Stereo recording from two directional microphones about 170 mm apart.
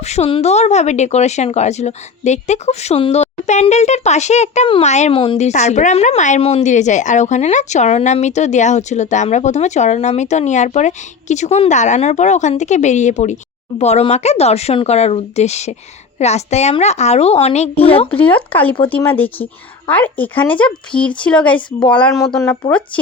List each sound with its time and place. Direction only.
0.0 s speech: 40° left (ahead or behind)
18.1 s speech: 10° left (ahead or behind)